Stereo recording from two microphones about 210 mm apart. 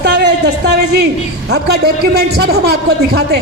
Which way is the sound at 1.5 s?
50° right (ahead or behind).